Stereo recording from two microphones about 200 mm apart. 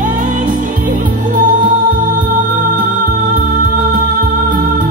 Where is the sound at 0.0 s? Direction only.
40° right (ahead or behind).